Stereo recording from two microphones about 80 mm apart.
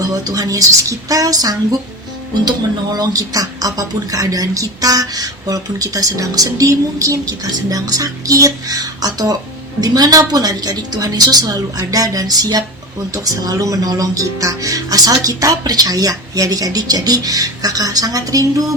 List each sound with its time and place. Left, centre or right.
0.1 s speech: right
2.9 s speech: right